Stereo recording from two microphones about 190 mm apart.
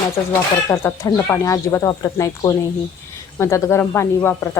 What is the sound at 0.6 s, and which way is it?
Speech, 15° left (ahead or behind).